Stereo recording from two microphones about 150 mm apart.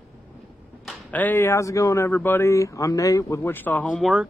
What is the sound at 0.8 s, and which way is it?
Speech, 10° left (ahead or behind).